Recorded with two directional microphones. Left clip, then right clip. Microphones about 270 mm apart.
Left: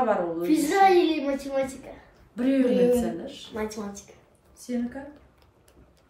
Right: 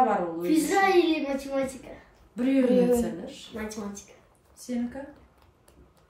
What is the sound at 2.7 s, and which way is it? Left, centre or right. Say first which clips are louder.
Speech: left 2 dB; centre.